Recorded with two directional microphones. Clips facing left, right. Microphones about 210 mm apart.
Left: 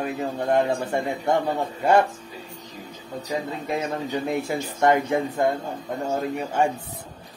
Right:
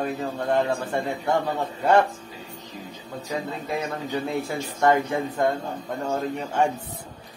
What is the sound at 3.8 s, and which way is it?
Speech, 20° left (ahead or behind).